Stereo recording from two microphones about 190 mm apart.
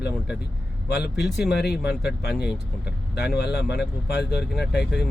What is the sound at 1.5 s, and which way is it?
Speech, 55° left (ahead or behind).